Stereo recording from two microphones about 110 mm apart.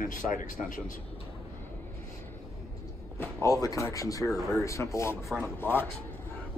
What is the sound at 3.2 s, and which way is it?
A man's voice, 30° left (ahead or behind).